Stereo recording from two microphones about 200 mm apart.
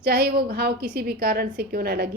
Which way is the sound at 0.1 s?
50° right (ahead or behind).